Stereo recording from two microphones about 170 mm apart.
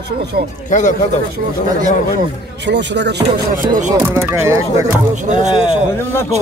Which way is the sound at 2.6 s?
90° right.